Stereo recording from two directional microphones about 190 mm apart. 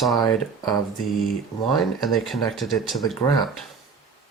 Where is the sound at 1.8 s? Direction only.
Centre (ahead or behind).